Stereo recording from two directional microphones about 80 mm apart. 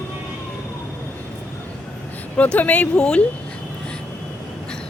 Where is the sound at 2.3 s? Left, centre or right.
Centre.